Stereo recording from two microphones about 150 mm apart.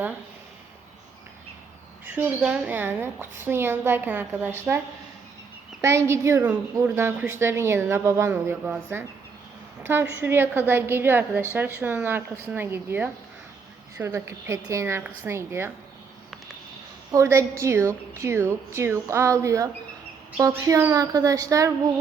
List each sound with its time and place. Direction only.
2.0 s a woman's voice: 10° right (ahead or behind)
5.8 s a woman's voice: 15° right (ahead or behind)
17.1 s speech: 20° right (ahead or behind)